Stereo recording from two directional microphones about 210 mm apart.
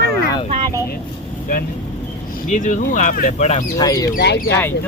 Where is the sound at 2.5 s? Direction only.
35° left (ahead or behind).